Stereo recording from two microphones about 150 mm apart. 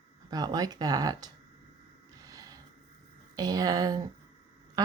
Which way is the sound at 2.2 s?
25° right (ahead or behind).